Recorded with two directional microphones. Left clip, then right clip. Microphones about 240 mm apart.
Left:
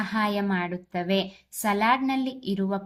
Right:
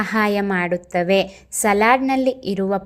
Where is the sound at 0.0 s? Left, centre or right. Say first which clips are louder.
Right 7 dB; right.